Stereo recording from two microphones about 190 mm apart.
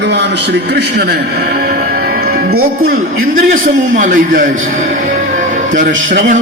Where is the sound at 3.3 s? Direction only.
45° right (ahead or behind).